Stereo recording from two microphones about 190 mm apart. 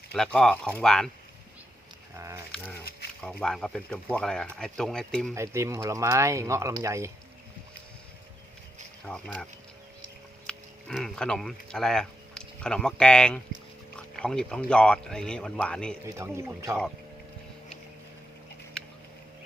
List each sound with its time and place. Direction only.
0.1 s speech: 5° left (ahead or behind)
2.1 s a sound: 15° right (ahead or behind)
3.2 s speech: centre (ahead or behind)
5.3 s speech: 15° right (ahead or behind)
9.0 s speech: 5° left (ahead or behind)
16.0 s speech: 15° right (ahead or behind)